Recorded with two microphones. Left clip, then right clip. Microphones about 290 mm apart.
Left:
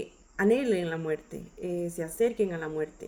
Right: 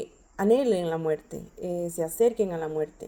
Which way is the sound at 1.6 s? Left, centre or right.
Right.